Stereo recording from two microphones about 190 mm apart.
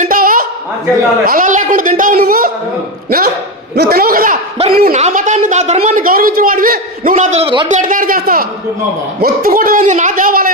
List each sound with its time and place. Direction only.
0.0 s a sound: 45° right (ahead or behind)
1.2 s a man's voice: 45° right (ahead or behind)
3.8 s a man's voice: 50° right (ahead or behind)
4.9 s a woman's voice: 40° right (ahead or behind)
7.7 s a man's voice: 45° right (ahead or behind)